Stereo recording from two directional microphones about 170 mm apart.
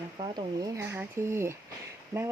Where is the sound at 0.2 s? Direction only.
25° right (ahead or behind).